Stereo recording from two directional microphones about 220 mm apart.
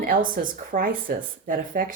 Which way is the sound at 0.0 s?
40° right (ahead or behind).